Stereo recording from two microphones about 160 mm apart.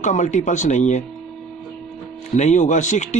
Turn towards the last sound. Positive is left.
turn(degrees=50)  # may be behind; listen again after turning